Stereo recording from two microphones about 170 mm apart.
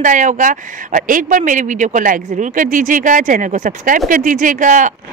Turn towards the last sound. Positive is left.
turn(degrees=-50)  # may be behind; listen again after turning